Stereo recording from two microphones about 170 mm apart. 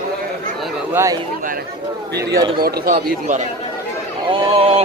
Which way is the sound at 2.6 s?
65° right (ahead or behind).